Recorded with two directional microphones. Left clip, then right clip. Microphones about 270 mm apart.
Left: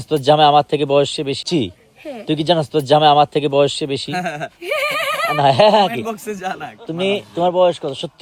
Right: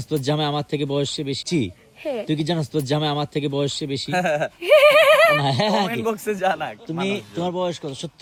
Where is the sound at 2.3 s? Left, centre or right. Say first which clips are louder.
Left 8 dB; left.